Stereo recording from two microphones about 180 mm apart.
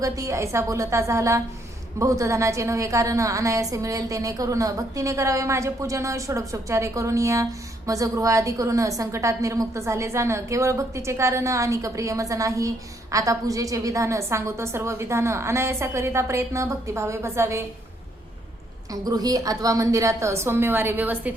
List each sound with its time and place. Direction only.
0.0 s a woman's voice: 15° right (ahead or behind)
18.9 s a woman's voice: 20° right (ahead or behind)